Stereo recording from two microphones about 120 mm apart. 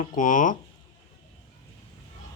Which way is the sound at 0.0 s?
90° left.